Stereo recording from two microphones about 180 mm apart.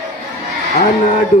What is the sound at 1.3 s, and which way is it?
Speech, 40° left (ahead or behind).